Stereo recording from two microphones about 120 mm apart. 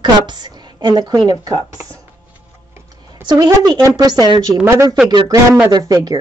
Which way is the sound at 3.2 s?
35° right (ahead or behind).